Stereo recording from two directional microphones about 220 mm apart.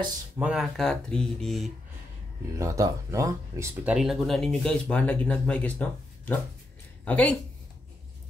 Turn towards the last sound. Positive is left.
turn(degrees=5)  # may be behind; listen again after turning